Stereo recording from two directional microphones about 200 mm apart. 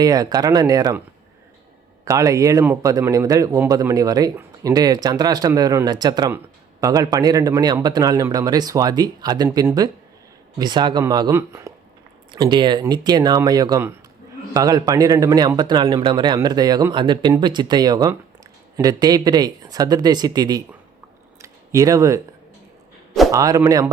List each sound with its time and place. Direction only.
0.0 s speech: 20° right (ahead or behind)
2.0 s a man's voice: 15° right (ahead or behind)
21.4 s a sound: 15° right (ahead or behind)
23.3 s a man's voice: 15° right (ahead or behind)